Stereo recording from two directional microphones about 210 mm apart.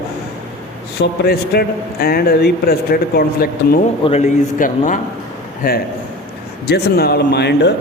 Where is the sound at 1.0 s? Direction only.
50° left (ahead or behind).